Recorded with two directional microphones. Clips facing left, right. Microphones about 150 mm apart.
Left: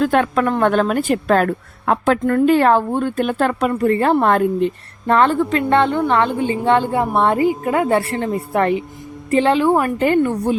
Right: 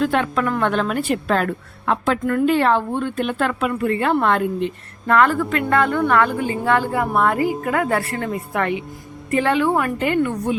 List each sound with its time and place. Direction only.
0.0 s a woman's voice: 45° left (ahead or behind)